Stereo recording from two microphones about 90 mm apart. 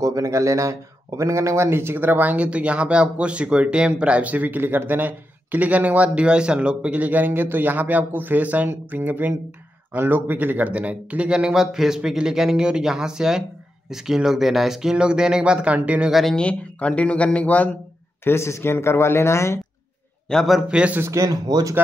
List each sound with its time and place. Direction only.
0.0 s speech: 40° right (ahead or behind); by 16.1 s 15° right (ahead or behind)
16.1 s a man's voice: centre (ahead or behind)
16.3 s speech: 10° left (ahead or behind)
18.2 s speech: 30° left (ahead or behind)
20.2 s a man's voice: centre (ahead or behind)
20.6 s speech: 10° right (ahead or behind)
21.0 s speech: 35° right (ahead or behind)